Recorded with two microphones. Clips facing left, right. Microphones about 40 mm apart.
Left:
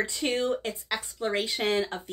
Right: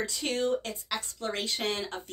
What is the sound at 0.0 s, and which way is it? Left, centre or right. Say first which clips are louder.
Speech: left 2 dB; left.